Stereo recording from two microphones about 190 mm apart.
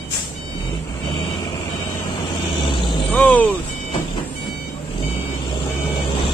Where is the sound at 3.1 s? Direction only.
10° left (ahead or behind).